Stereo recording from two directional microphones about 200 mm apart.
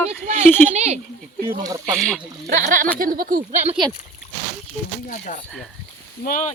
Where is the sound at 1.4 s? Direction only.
20° right (ahead or behind).